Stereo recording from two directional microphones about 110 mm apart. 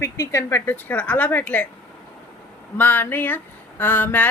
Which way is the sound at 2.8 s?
15° left (ahead or behind).